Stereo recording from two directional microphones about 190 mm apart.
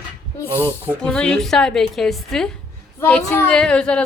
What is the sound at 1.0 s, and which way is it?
A woman's voice, 5° left (ahead or behind).